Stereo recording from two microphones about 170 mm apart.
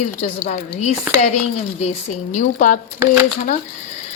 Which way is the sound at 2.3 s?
50° left (ahead or behind).